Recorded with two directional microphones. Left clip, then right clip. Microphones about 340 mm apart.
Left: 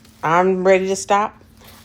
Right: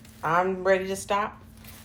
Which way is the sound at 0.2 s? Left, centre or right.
Left.